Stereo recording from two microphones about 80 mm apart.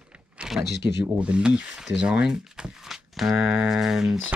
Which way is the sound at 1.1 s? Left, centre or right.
Centre.